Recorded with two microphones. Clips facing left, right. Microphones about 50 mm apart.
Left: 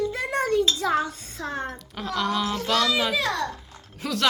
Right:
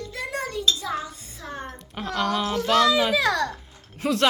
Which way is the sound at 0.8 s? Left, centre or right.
Left.